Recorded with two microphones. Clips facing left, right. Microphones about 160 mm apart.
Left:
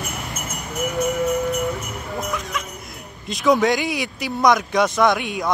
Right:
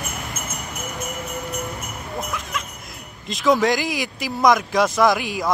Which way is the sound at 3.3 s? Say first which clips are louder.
Left 1 dB; centre (ahead or behind).